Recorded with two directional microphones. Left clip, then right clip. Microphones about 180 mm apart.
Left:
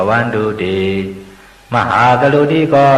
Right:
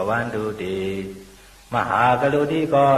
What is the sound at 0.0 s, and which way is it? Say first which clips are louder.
A man's voice: left 9 dB; 30° right (ahead or behind).